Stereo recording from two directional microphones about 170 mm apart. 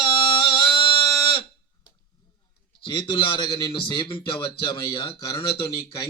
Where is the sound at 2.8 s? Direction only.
30° left (ahead or behind).